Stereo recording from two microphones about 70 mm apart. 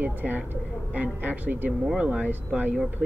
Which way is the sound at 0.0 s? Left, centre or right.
Right.